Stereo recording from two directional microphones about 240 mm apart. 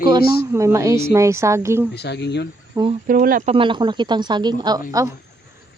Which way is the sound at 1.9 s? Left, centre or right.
Left.